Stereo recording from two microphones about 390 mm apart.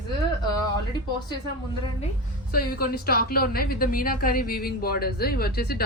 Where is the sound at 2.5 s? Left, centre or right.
Left.